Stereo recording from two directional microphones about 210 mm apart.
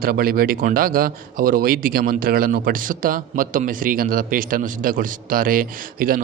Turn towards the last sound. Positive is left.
turn(degrees=-45)  # may be behind; listen again after turning